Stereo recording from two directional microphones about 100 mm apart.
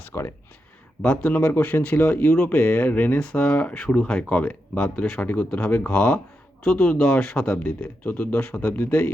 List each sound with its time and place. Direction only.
0.1 s speech: 25° left (ahead or behind)
1.0 s speech: 15° left (ahead or behind)